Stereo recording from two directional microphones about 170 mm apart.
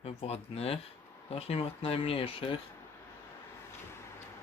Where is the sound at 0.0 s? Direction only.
35° left (ahead or behind).